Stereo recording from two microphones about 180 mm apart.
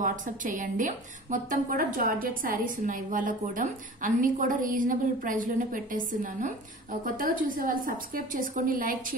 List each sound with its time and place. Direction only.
0.0 s a woman's voice: 45° right (ahead or behind)